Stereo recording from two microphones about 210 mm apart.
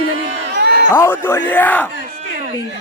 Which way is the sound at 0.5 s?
55° right (ahead or behind).